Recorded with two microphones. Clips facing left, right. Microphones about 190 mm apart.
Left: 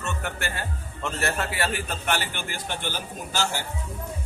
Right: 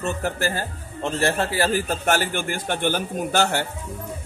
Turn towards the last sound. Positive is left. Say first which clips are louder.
# right 7 dB
turn(degrees=-60)  # may be behind; listen again after turning